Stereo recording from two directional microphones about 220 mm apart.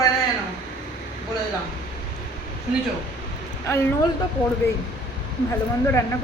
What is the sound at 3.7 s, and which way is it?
Speech, 15° left (ahead or behind).